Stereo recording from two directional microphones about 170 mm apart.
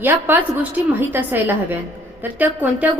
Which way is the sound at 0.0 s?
10° right (ahead or behind).